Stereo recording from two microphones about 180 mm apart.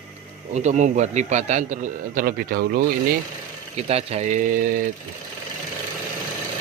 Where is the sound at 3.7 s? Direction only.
35° right (ahead or behind).